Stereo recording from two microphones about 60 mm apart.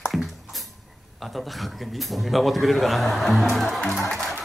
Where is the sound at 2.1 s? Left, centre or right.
Centre.